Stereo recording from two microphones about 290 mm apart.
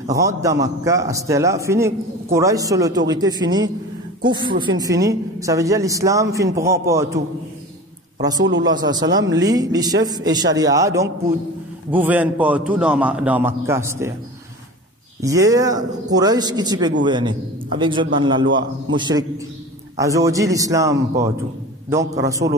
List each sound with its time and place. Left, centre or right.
0.1 s a man's voice: centre
8.4 s a man's voice: right
8.6 s a man's voice: centre
15.2 s a man's voice: centre